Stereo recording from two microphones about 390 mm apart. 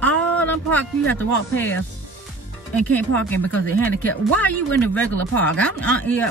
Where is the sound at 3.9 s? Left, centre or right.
Left.